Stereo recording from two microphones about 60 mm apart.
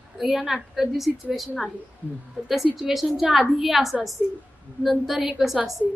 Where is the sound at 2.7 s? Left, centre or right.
Centre.